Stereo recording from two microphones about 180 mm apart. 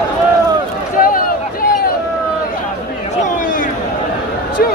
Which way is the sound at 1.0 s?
50° left (ahead or behind).